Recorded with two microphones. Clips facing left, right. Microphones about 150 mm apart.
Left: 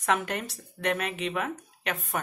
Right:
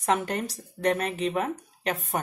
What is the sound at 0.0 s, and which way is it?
Speech, 35° right (ahead or behind).